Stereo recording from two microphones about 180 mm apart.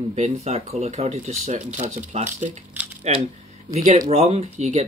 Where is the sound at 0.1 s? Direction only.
40° right (ahead or behind).